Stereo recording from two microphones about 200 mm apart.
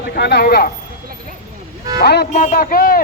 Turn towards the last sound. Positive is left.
turn(degrees=45)  # may be behind; listen again after turning